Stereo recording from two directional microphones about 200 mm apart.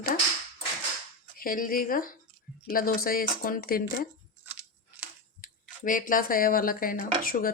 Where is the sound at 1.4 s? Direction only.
45° left (ahead or behind).